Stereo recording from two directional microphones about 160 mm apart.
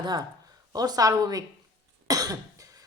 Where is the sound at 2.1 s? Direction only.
20° right (ahead or behind).